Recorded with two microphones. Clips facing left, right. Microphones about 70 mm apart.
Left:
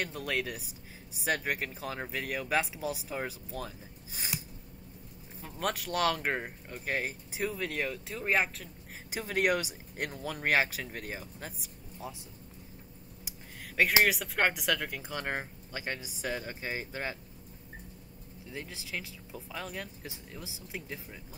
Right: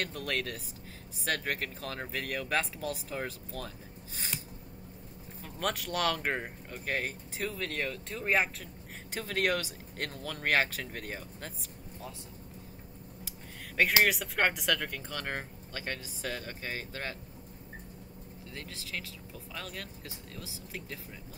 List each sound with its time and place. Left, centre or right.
0.0 s speech: centre
5.4 s speech: centre
9.1 s speech: centre
14.0 s speech: centre
18.5 s speech: centre